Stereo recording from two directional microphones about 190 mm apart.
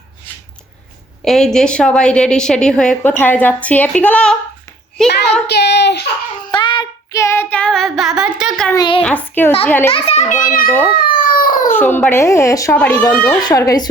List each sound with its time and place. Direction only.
1.2 s a woman's voice: centre (ahead or behind)
5.5 s a child's voice: 60° left (ahead or behind)
6.5 s child singing: 25° left (ahead or behind); by 8.7 s centre (ahead or behind)
8.7 s a woman's voice: 20° left (ahead or behind)
9.0 s speech: 5° left (ahead or behind)
9.9 s a child's voice: 35° left (ahead or behind)
10.9 s a sound: 50° left (ahead or behind)
11.7 s speech: 10° left (ahead or behind)